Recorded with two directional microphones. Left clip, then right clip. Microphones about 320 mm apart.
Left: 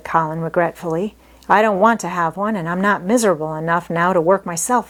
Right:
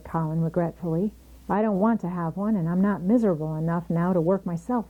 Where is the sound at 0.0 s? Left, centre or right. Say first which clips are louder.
Left 12 dB; centre.